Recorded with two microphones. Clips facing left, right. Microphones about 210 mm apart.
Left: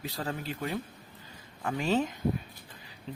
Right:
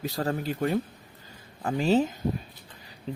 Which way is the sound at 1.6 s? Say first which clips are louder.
Right 5 dB; 30° right (ahead or behind).